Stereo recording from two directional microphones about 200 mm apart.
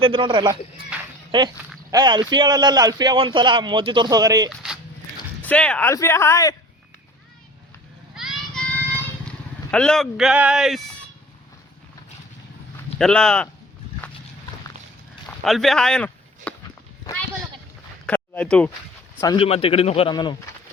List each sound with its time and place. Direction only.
0.0 s a man's voice: 25° right (ahead or behind)
4.4 s a sound: 5° right (ahead or behind)
5.4 s speech: 5° left (ahead or behind)
8.1 s vehicle: centre (ahead or behind)
9.7 s speech: 5° left (ahead or behind)
13.0 s speech: 5° left (ahead or behind)
15.4 s speech: centre (ahead or behind)
18.0 s a sound: 5° left (ahead or behind)
19.2 s speech: 25° left (ahead or behind)